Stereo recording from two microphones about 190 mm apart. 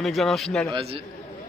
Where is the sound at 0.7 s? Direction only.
30° right (ahead or behind).